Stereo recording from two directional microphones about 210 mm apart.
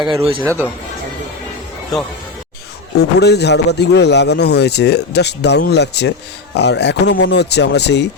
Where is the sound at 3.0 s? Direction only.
50° left (ahead or behind).